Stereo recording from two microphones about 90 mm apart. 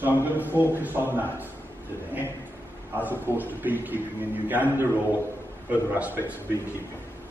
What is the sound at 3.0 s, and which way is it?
A man's voice, 20° right (ahead or behind).